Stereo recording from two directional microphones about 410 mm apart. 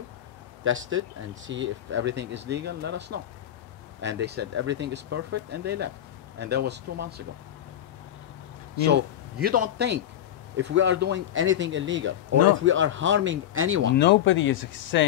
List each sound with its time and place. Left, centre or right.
0.7 s speech: right
8.8 s speech: right
13.9 s speech: left